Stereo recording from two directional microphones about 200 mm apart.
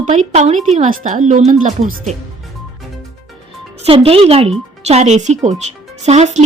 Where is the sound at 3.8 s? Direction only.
30° right (ahead or behind).